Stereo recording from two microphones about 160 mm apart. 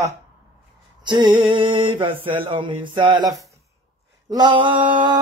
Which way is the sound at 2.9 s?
30° right (ahead or behind).